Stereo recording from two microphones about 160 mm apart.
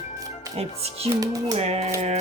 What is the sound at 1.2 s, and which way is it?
Speech, 20° right (ahead or behind).